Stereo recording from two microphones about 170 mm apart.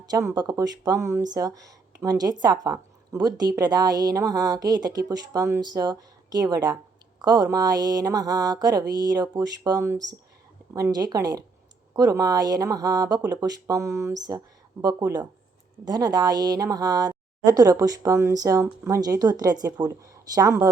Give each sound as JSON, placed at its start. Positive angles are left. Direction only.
{"t": 0.0, "sound": "a woman's voice", "side_deg": -20}